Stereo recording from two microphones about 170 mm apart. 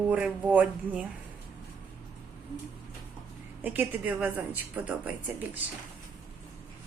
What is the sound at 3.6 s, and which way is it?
Speech, 10° right (ahead or behind).